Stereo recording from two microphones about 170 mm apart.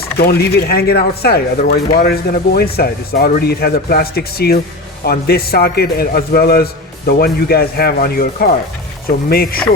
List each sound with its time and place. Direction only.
0.2 s speech: 65° left (ahead or behind)